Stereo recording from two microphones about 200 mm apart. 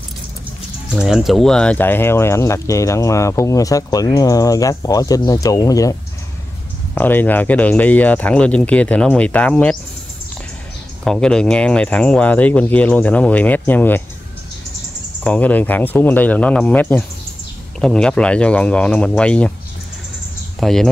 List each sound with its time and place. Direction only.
0.9 s speech: centre (ahead or behind); by 5.9 s 15° left (ahead or behind)
7.0 s speech: 10° left (ahead or behind)
11.1 s speech: 5° left (ahead or behind)
15.2 s speech: 5° left (ahead or behind)
20.6 s speech: centre (ahead or behind)